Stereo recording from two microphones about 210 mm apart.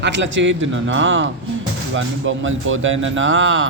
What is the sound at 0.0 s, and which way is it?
A man's voice, 60° right (ahead or behind).